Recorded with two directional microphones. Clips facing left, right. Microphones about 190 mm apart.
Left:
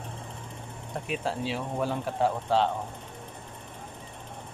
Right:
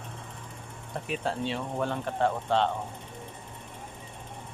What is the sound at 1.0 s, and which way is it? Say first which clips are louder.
Speech: even; centre (ahead or behind).